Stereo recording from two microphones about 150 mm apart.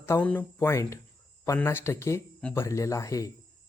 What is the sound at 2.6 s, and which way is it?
Speech, 20° left (ahead or behind).